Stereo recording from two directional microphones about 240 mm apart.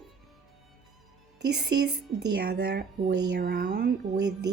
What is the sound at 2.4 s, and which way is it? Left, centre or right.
Speech, right.